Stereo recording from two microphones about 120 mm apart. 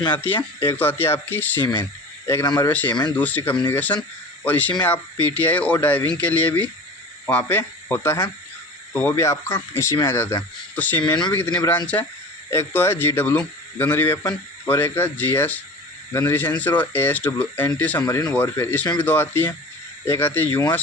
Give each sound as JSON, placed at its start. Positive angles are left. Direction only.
{"t": 0.1, "sound": "a man's voice", "side_deg": 15}
{"t": 0.3, "sound": "speech", "side_deg": 45}
{"t": 0.8, "sound": "a man's voice", "side_deg": 15}
{"t": 1.6, "sound": "speech", "side_deg": 35}
{"t": 2.6, "sound": "a man's voice", "side_deg": 15}
{"t": 2.9, "sound": "speech", "side_deg": 35}
{"t": 3.2, "sound": "a man's voice", "side_deg": 15}
{"t": 11.0, "sound": "speech", "side_deg": 35}
{"t": 11.3, "sound": "a man's voice", "side_deg": 10}
{"t": 18.0, "sound": "a man's voice", "side_deg": 30}